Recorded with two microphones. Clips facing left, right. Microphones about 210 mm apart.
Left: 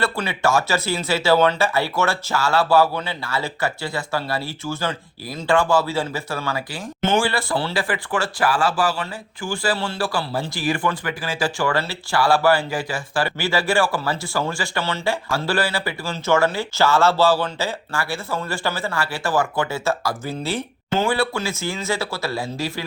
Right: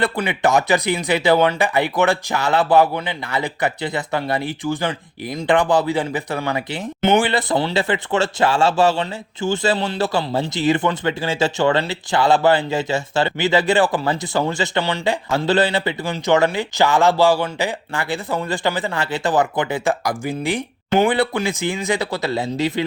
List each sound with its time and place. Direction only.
0.0 s speech: 15° right (ahead or behind)